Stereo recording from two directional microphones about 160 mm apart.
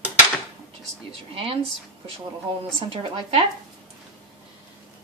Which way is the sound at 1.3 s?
35° right (ahead or behind).